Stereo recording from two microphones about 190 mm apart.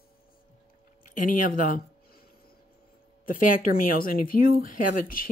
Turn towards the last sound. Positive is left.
turn(degrees=45)  # may be behind; listen again after turning